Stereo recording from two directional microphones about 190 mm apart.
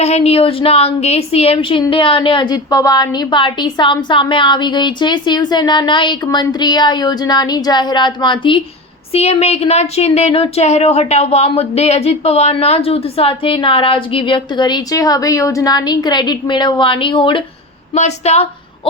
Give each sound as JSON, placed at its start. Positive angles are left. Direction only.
{"t": 0.0, "sound": "a woman's voice", "side_deg": 35}